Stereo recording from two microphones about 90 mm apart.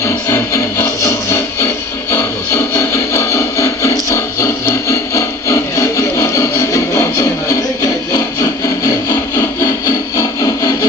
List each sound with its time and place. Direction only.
0.0 s music: 35° left (ahead or behind)